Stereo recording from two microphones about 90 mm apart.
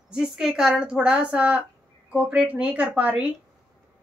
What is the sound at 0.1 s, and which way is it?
Speech, 5° right (ahead or behind).